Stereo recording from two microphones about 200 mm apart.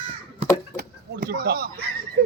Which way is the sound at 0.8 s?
50° right (ahead or behind).